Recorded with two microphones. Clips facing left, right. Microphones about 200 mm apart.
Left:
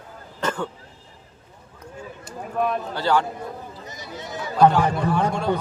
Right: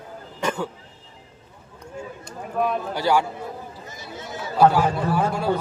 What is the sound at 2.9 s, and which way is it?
Speech, 10° right (ahead or behind).